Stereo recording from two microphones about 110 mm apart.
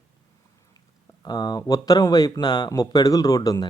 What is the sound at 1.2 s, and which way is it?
Speech, 40° left (ahead or behind).